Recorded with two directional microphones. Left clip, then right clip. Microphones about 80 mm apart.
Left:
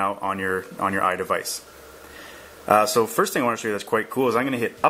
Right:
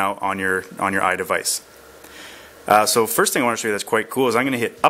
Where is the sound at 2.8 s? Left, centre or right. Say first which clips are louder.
Right 2 dB; right.